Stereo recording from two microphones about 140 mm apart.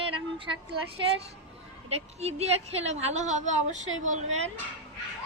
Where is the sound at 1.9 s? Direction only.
50° right (ahead or behind).